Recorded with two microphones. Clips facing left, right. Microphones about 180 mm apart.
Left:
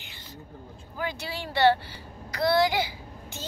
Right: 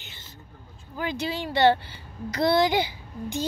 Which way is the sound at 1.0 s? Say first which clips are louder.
Right 5 dB; 20° right (ahead or behind).